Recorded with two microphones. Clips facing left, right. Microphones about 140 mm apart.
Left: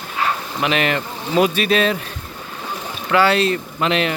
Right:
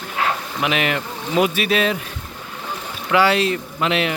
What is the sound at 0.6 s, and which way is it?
Speech, 10° right (ahead or behind).